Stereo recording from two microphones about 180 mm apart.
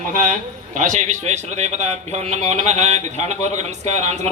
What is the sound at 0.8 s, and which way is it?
A man's voice, 45° right (ahead or behind).